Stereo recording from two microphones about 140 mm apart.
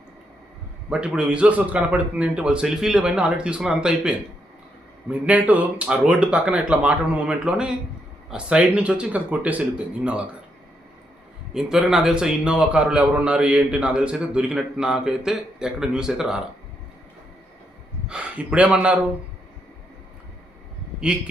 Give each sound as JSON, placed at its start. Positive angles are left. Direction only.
{"t": 0.9, "sound": "a man's voice", "side_deg": -5}
{"t": 11.5, "sound": "a man's voice", "side_deg": 0}
{"t": 18.1, "sound": "a man's voice", "side_deg": -10}